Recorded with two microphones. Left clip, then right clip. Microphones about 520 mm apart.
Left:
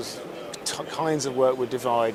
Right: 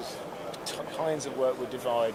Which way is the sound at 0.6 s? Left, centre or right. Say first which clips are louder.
Left 4 dB; left.